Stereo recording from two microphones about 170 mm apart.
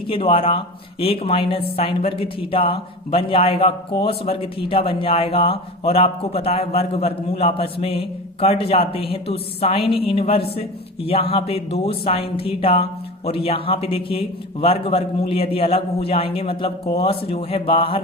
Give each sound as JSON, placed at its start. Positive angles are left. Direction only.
{"t": 0.1, "sound": "speech", "side_deg": 30}